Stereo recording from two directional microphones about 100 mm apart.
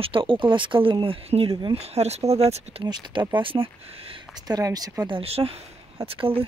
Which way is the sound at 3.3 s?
60° right (ahead or behind).